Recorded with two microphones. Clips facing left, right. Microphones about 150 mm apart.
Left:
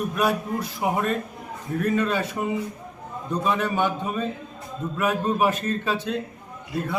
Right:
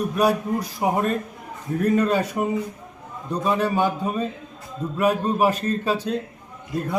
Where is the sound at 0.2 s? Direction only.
35° right (ahead or behind).